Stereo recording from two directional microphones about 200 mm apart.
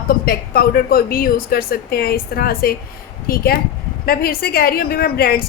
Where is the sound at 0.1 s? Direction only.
50° left (ahead or behind).